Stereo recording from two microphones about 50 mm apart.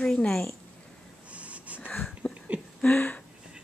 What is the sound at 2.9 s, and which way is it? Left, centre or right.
Speech, left.